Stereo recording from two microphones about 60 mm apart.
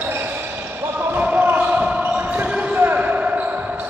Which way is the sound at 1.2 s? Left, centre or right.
Right.